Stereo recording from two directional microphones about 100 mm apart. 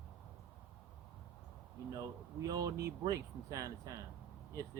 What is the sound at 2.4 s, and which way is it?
Speech, 35° right (ahead or behind).